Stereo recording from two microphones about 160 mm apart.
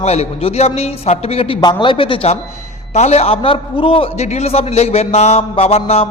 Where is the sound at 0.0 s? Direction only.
40° left (ahead or behind).